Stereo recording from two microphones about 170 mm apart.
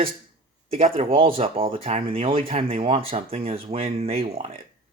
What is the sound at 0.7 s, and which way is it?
Speech, 35° right (ahead or behind).